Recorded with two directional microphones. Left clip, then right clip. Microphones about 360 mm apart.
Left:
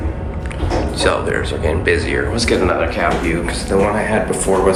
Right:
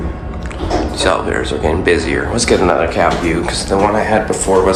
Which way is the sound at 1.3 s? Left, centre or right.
Centre.